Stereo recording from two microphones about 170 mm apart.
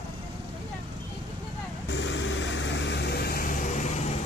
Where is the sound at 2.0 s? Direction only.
90° left; by 4.0 s 45° left (ahead or behind).